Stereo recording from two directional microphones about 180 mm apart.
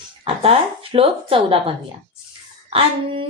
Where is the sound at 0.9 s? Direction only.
30° right (ahead or behind).